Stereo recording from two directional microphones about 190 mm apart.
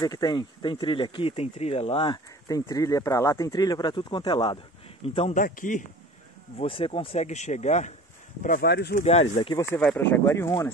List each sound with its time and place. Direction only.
0.0 s speech: 20° left (ahead or behind)
5.4 s a man's voice: 45° left (ahead or behind)
6.6 s speech: 30° left (ahead or behind); by 8.9 s 60° left (ahead or behind)
8.9 s speech: 35° left (ahead or behind)
9.6 s speech: 10° left (ahead or behind)